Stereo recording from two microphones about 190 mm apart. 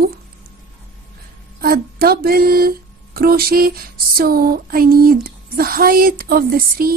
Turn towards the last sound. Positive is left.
turn(degrees=-50)  # may be behind; listen again after turning